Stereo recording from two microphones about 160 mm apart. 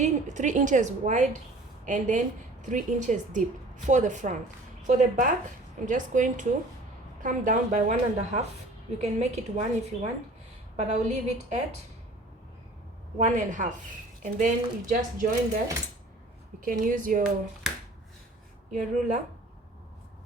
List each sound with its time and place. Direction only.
0.0 s a woman's voice: 50° right (ahead or behind)
13.1 s a woman's voice: 50° right (ahead or behind)
16.6 s speech: 55° right (ahead or behind)
18.7 s a woman's voice: 50° right (ahead or behind)